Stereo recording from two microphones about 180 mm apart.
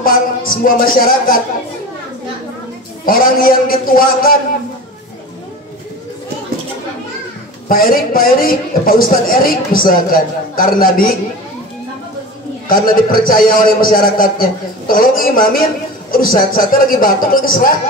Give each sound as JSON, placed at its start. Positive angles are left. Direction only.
{"t": 0.0, "sound": "a man's voice", "side_deg": 50}
{"t": 3.1, "sound": "a man's voice", "side_deg": 50}
{"t": 7.6, "sound": "a man's voice", "side_deg": 55}
{"t": 12.6, "sound": "a man's voice", "side_deg": 55}